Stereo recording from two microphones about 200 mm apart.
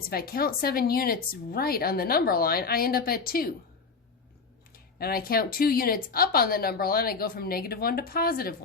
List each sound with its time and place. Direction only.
0.1 s speech: 50° left (ahead or behind)
4.7 s speech: 50° left (ahead or behind)